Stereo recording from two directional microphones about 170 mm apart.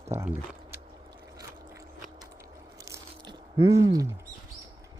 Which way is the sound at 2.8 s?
25° right (ahead or behind).